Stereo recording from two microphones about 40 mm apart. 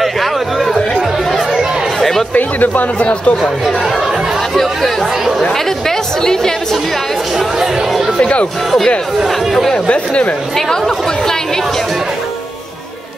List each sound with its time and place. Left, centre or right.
0.0 s a sound: centre
2.0 s chatter: centre
2.3 s speech: left
3.0 s speech: left
5.5 s a woman's voice: centre
7.3 s speech: centre
8.2 s speech: left
9.2 s speech: centre